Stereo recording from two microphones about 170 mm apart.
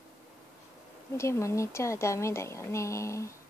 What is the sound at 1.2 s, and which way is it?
Speech, 15° left (ahead or behind).